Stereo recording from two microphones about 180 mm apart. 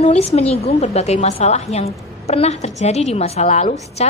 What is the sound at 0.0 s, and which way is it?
A woman's voice, 35° left (ahead or behind).